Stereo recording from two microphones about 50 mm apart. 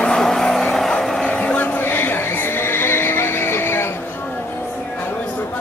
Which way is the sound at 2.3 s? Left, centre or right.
Left.